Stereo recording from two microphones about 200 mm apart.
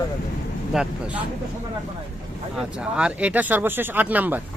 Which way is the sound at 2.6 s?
5° right (ahead or behind).